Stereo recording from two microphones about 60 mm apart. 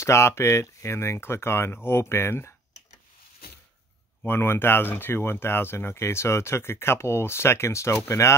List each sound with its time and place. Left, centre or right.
0.0 s speech: left
4.3 s speech: left